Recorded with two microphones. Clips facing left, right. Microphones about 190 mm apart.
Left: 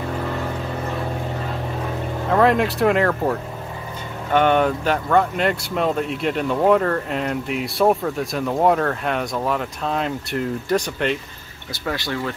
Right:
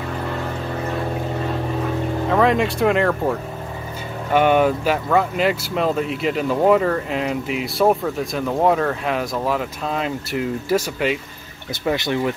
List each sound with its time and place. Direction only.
2.2 s speech: centre (ahead or behind)
11.8 s speech: 20° right (ahead or behind)